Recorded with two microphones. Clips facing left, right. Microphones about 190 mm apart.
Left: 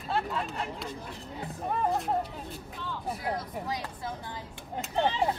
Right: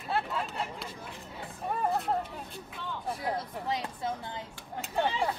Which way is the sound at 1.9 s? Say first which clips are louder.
Even; centre (ahead or behind).